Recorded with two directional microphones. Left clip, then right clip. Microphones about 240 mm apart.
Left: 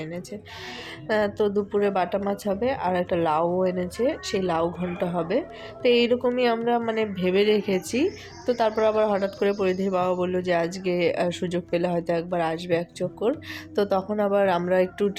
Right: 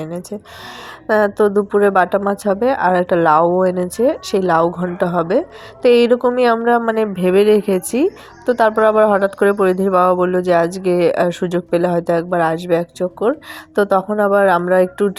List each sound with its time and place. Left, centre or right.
0.0 s speech: right